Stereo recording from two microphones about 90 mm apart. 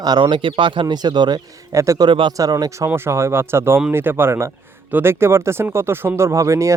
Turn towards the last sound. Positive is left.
turn(degrees=-35)  # may be behind; listen again after turning